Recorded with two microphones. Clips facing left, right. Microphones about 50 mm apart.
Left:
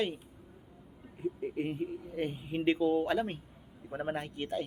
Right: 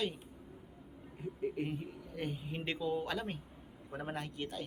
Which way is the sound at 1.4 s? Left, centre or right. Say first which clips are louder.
Left 1 dB; centre.